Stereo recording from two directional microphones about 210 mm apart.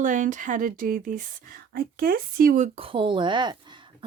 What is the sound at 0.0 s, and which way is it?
Speech, 40° right (ahead or behind).